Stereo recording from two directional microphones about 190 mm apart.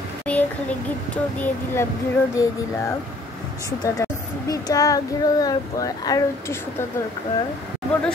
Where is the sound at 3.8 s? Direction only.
20° left (ahead or behind).